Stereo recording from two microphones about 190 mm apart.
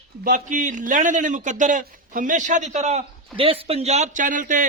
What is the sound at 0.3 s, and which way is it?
A man's voice, 45° right (ahead or behind).